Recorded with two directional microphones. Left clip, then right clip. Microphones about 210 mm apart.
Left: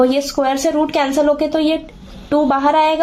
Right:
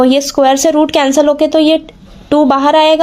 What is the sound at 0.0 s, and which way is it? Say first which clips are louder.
A woman's voice: right 6 dB; 40° right (ahead or behind).